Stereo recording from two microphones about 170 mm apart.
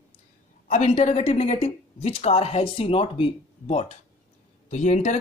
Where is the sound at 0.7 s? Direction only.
40° left (ahead or behind).